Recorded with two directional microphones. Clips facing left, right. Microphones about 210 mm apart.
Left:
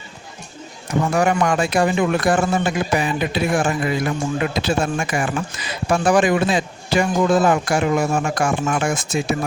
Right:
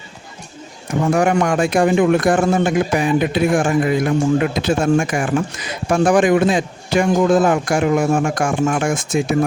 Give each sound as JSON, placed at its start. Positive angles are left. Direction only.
{"t": 0.9, "sound": "speech", "side_deg": -50}